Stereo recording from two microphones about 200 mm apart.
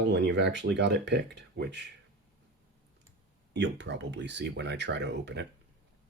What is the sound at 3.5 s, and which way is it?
Speech, 60° right (ahead or behind).